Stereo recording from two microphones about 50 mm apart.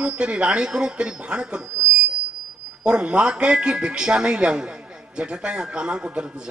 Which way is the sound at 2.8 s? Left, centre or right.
Centre.